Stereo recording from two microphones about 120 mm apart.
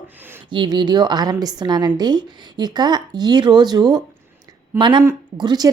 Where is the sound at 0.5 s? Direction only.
40° right (ahead or behind).